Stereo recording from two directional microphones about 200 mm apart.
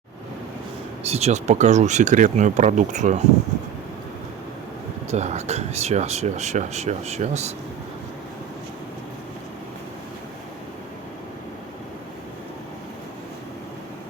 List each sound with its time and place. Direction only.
1.0 s speech: 30° right (ahead or behind)
5.1 s speech: 35° right (ahead or behind)